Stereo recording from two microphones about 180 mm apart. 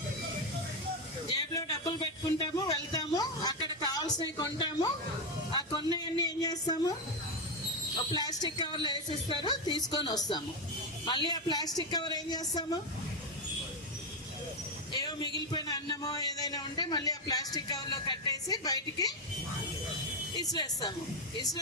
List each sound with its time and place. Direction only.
1.3 s speech: 20° left (ahead or behind)
7.9 s speech: 25° left (ahead or behind)
14.9 s speech: 25° left (ahead or behind)
20.4 s speech: 20° left (ahead or behind)